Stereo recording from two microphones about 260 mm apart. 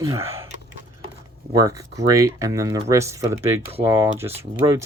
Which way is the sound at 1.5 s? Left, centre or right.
Centre.